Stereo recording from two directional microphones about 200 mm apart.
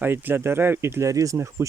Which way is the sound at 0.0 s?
10° right (ahead or behind).